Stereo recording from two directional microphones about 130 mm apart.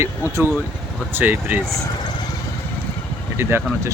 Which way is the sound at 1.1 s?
15° right (ahead or behind).